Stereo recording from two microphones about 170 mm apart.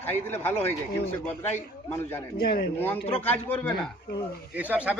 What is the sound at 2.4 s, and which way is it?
Speech, 60° left (ahead or behind).